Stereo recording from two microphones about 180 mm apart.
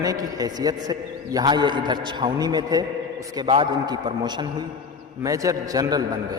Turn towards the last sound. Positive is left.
turn(degrees=-20)  # may be behind; listen again after turning